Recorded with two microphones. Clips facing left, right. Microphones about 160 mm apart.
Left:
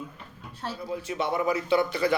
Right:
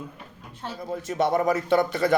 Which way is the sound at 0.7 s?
45° right (ahead or behind).